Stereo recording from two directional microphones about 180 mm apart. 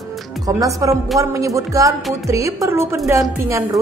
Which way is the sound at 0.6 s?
20° right (ahead or behind).